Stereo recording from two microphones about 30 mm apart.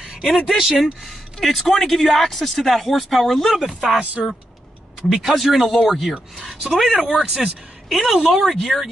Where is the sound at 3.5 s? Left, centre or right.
Centre.